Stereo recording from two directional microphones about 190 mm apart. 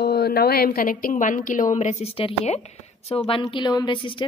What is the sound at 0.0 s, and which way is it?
A woman's voice, 55° left (ahead or behind).